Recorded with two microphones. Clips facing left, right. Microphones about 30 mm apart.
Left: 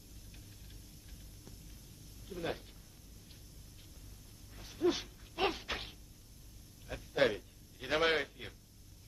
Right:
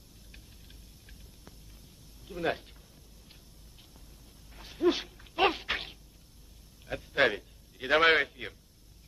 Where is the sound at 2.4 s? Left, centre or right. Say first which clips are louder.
Right 8 dB; right.